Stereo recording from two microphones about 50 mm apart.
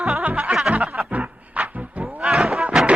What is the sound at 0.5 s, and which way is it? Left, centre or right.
Music, right.